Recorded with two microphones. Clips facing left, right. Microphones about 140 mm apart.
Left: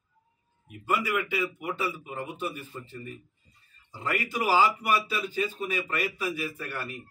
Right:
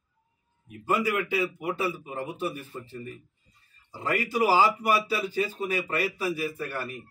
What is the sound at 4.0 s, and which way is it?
A man's voice, 35° right (ahead or behind).